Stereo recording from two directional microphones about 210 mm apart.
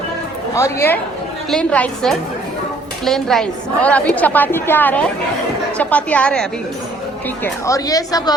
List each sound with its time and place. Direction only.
0.5 s a woman's voice: 15° left (ahead or behind)
7.4 s a woman's voice: 15° left (ahead or behind)